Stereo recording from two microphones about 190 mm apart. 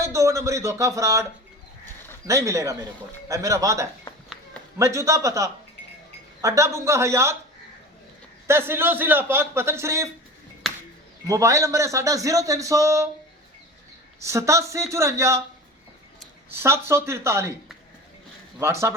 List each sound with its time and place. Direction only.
0.0 s speech: 15° right (ahead or behind)
8.4 s speech: 10° right (ahead or behind)
11.3 s speech: 15° right (ahead or behind)
14.2 s speech: 15° right (ahead or behind)
18.6 s speech: 15° right (ahead or behind)